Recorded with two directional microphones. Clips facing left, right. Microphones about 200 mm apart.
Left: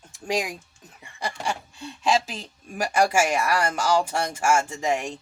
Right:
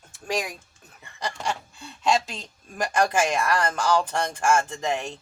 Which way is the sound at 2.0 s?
5° left (ahead or behind).